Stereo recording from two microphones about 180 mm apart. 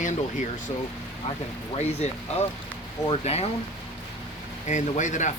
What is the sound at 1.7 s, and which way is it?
Speech, 35° left (ahead or behind).